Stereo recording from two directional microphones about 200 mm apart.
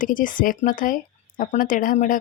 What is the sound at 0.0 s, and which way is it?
Speech, 40° left (ahead or behind).